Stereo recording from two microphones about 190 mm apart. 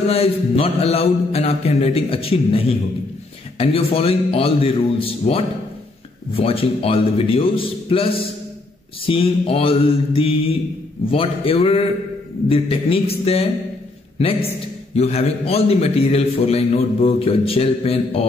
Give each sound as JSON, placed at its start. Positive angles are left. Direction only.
{"t": 0.1, "sound": "a man's voice", "side_deg": 30}